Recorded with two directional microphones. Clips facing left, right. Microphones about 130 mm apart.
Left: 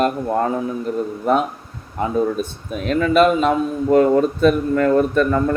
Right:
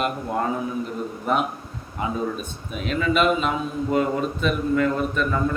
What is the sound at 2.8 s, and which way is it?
A man's voice, 45° left (ahead or behind).